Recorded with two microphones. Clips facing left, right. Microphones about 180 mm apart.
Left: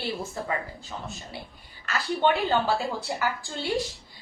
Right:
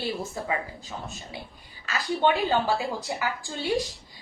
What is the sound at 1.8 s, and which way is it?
A woman's voice, 15° right (ahead or behind).